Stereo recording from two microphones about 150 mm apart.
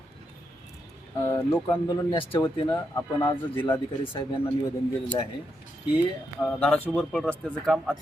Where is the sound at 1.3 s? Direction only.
15° left (ahead or behind).